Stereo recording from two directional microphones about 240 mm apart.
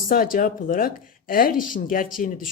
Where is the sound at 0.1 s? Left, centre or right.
Left.